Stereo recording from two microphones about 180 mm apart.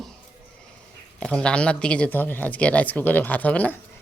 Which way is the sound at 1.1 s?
5° left (ahead or behind).